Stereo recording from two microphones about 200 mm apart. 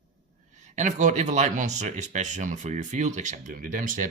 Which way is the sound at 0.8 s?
35° right (ahead or behind).